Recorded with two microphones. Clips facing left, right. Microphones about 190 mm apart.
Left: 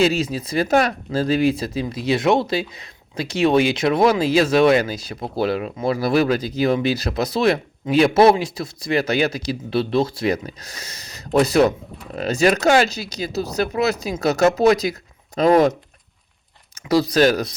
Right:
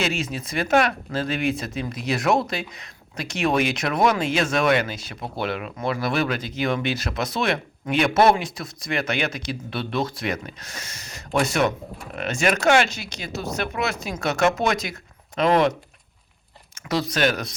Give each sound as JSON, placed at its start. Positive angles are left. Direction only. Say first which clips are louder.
{"t": 0.0, "sound": "speech", "louder": "left 7 dB", "side_deg": 35}
{"t": 16.9, "sound": "speech", "louder": "left 7 dB", "side_deg": 35}